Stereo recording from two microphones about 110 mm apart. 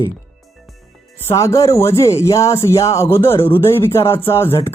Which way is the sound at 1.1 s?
25° left (ahead or behind).